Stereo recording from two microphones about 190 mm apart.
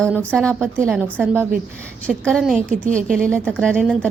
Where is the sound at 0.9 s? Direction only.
10° right (ahead or behind).